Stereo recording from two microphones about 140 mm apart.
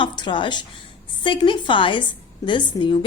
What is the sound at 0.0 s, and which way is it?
A woman's voice, 35° left (ahead or behind).